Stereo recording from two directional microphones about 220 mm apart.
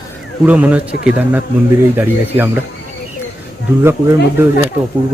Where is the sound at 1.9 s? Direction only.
10° right (ahead or behind).